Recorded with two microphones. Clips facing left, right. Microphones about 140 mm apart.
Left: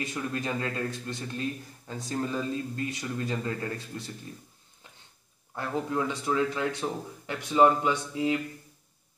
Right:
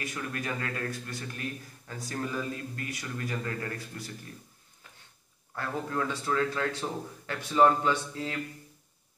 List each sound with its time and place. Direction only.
0.0 s a man's voice: 25° left (ahead or behind)
5.5 s speech: 15° left (ahead or behind)